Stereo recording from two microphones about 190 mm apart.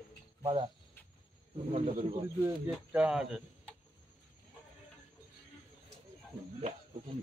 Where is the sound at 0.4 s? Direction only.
25° right (ahead or behind).